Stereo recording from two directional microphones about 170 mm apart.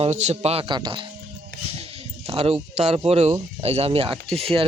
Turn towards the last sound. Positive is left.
turn(degrees=-35)  # may be behind; listen again after turning